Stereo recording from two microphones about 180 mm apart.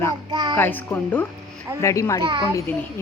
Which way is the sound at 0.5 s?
10° left (ahead or behind).